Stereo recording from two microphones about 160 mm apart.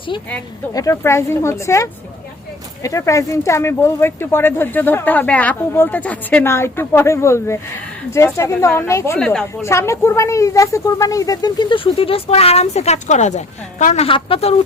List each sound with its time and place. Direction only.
0.7 s speech: 20° left (ahead or behind)
9.1 s speech: 5° left (ahead or behind)
9.6 s speech: 15° left (ahead or behind); by 14.6 s 35° left (ahead or behind)